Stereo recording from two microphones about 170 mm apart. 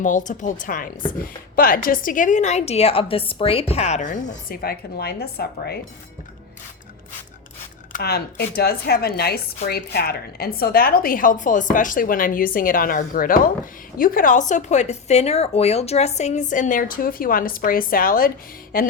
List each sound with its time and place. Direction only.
0.0 s a woman's voice: 50° left (ahead or behind); by 5.8 s 65° left (ahead or behind)
7.9 s a woman's voice: 65° left (ahead or behind)